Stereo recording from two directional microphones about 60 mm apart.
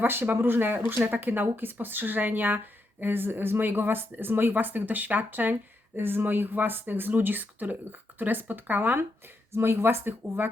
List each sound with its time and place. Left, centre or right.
0.0 s speech: right